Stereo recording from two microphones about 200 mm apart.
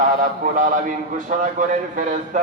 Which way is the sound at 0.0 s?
40° right (ahead or behind).